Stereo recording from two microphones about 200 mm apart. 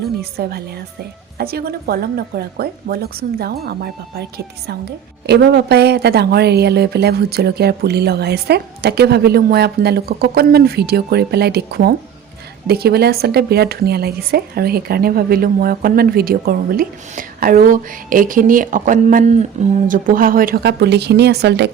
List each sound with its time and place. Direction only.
0.0 s speech: 50° right (ahead or behind)